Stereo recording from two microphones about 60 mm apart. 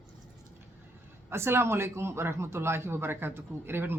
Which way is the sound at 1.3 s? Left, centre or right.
Right.